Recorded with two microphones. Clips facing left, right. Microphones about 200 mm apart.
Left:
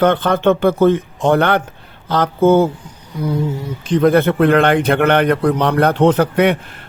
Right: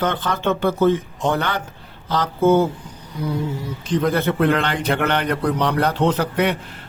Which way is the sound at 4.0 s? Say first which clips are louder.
Left 7 dB; 55° left (ahead or behind).